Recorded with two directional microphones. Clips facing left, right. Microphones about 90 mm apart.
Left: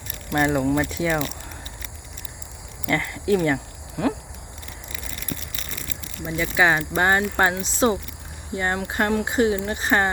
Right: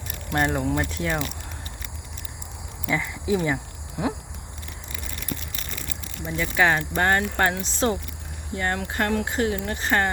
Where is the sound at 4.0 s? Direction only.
10° right (ahead or behind).